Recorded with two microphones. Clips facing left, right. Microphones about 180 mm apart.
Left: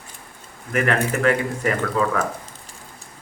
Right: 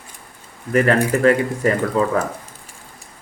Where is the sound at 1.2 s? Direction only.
35° right (ahead or behind).